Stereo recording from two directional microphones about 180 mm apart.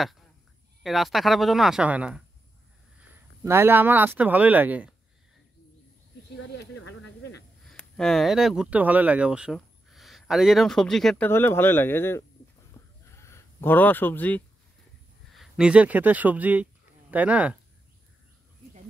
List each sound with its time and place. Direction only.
0.8 s speech: centre (ahead or behind)
3.4 s speech: 15° right (ahead or behind)
6.6 s a sound: 80° left
7.6 s speech: centre (ahead or behind)
13.0 s sheep: 15° left (ahead or behind)
15.3 s speech: 5° right (ahead or behind)